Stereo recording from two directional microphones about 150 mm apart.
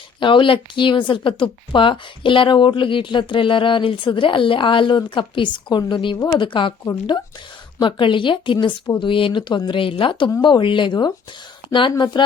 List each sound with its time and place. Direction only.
0.2 s a woman's voice: 35° left (ahead or behind)
7.8 s a woman's voice: 35° left (ahead or behind)